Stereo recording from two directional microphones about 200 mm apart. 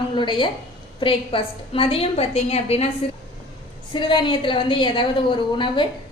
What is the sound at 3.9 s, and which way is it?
A woman's voice, 25° left (ahead or behind).